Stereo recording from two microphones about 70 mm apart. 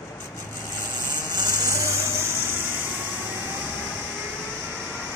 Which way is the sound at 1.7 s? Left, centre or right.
Right.